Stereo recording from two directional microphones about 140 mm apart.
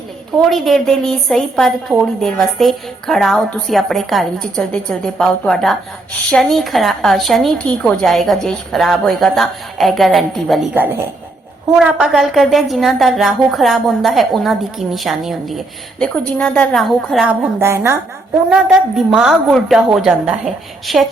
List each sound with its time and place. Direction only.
0.5 s speech: centre (ahead or behind)
11.8 s speech: 5° right (ahead or behind)
17.6 s a woman's voice: 20° right (ahead or behind)
18.5 s speech: 5° right (ahead or behind)